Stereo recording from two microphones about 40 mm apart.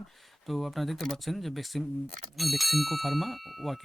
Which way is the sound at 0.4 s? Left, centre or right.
Centre.